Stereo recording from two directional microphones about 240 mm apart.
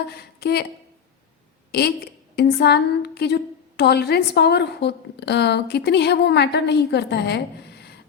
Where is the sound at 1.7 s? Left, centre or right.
Left.